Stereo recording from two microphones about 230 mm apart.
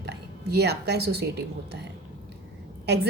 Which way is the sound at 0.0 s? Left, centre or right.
Right.